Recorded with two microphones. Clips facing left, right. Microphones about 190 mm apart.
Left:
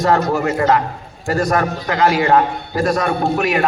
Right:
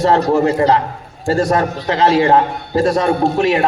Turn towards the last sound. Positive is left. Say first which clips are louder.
# right 3 dB
turn(degrees=-25)  # may be behind; listen again after turning